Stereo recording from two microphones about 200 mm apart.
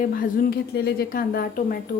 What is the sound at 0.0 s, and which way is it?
Speech, 45° left (ahead or behind).